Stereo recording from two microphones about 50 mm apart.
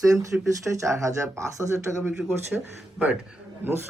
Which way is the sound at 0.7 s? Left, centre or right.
Right.